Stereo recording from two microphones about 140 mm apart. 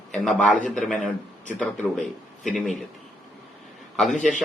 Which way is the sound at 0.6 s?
65° left (ahead or behind).